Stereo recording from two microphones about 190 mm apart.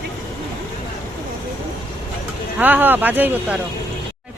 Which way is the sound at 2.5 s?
10° right (ahead or behind).